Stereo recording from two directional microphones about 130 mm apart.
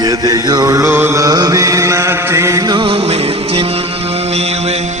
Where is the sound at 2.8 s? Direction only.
50° right (ahead or behind).